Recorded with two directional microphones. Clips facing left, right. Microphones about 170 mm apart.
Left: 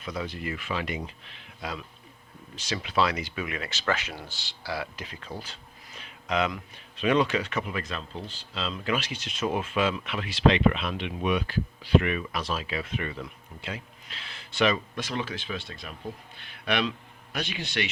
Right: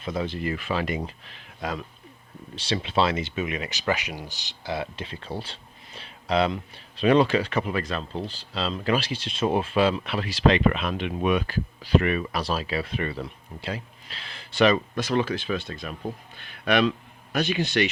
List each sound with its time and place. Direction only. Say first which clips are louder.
0.0 s speech: right 5 dB; 25° right (ahead or behind); by 1.8 s 45° right (ahead or behind)
2.6 s speech: right 3 dB; 30° right (ahead or behind)